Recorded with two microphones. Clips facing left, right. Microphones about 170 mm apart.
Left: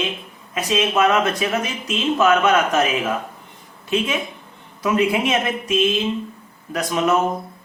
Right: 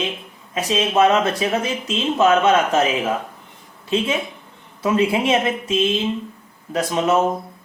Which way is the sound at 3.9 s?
30° right (ahead or behind).